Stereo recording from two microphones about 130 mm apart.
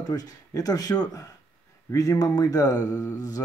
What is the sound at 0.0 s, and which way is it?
Speech, 30° left (ahead or behind).